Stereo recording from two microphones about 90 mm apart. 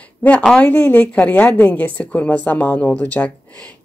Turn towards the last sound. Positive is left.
turn(degrees=15)  # may be behind; listen again after turning